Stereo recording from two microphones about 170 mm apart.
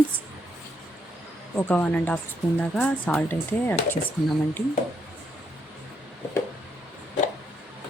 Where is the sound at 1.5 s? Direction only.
10° left (ahead or behind).